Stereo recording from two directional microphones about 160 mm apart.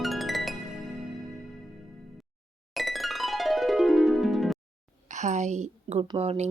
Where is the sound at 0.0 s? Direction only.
Centre (ahead or behind).